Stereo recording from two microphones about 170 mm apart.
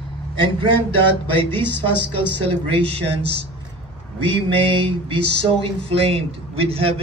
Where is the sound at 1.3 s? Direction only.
10° left (ahead or behind).